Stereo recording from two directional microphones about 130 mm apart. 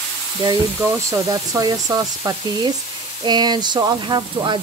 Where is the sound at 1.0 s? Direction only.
25° right (ahead or behind).